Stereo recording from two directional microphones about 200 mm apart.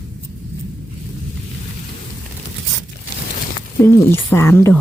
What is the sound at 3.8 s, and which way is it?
Speech, 10° left (ahead or behind).